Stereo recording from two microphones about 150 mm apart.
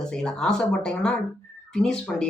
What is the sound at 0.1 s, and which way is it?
A man's voice, 5° left (ahead or behind).